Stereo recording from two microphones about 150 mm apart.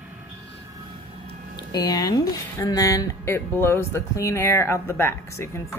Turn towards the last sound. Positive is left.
turn(degrees=15)  # may be behind; listen again after turning